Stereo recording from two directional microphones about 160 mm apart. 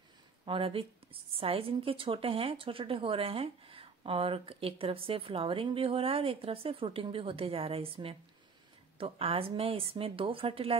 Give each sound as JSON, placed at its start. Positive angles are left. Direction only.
{"t": 0.5, "sound": "a woman's voice", "side_deg": -35}